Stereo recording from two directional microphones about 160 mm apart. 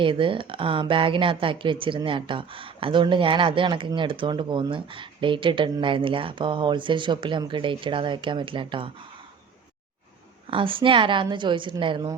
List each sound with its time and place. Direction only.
0.0 s speech: 30° right (ahead or behind)
10.4 s speech: 35° right (ahead or behind)